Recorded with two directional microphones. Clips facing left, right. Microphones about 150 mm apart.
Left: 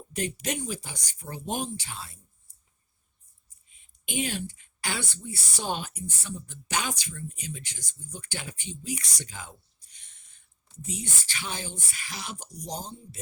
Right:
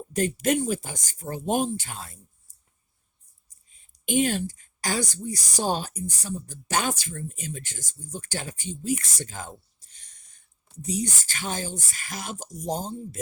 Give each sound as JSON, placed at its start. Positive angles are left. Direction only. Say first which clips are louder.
{"t": 0.1, "sound": "speech", "louder": "right 8 dB", "side_deg": -45}
{"t": 3.7, "sound": "speech", "louder": "right 11 dB", "side_deg": -40}